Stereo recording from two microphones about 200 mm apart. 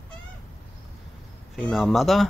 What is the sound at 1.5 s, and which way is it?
Speech, 5° left (ahead or behind).